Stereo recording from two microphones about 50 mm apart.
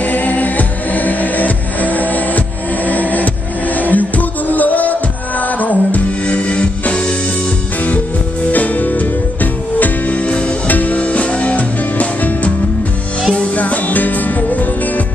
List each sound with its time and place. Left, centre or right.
0.0 s music: left
8.5 s music: left